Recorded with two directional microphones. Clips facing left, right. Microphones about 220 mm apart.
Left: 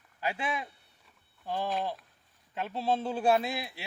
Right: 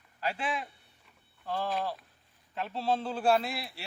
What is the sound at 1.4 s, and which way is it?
A man's voice, 15° left (ahead or behind).